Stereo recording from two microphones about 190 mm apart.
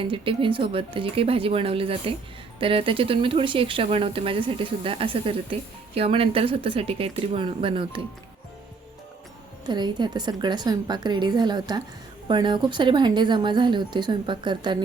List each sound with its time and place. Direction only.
0.0 s speech: 30° right (ahead or behind)
9.6 s speech: 25° right (ahead or behind)